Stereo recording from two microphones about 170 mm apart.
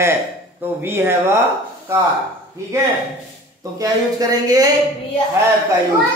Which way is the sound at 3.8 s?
20° right (ahead or behind).